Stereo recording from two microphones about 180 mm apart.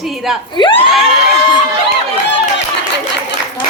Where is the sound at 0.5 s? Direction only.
25° left (ahead or behind).